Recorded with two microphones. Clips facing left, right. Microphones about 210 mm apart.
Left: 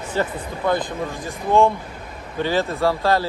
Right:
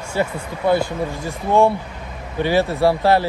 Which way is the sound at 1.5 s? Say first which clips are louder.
Right 1 dB; 15° right (ahead or behind).